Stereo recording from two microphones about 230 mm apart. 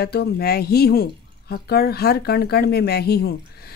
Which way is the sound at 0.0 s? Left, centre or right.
Left.